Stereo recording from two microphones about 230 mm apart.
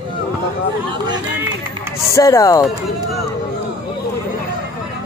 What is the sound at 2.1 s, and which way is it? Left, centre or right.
Speech, centre.